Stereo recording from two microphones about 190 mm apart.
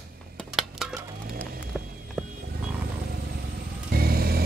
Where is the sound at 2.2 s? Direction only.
5° right (ahead or behind).